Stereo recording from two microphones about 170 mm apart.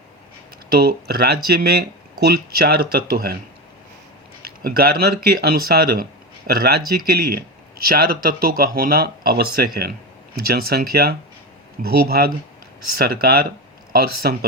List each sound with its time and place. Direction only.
0.7 s speech: 65° right (ahead or behind)
4.6 s speech: 65° right (ahead or behind)